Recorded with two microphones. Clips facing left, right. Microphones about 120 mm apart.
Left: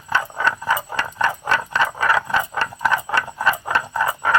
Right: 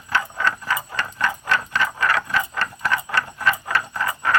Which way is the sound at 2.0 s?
25° left (ahead or behind).